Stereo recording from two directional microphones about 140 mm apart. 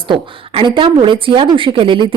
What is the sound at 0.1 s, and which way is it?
Speech, 35° right (ahead or behind).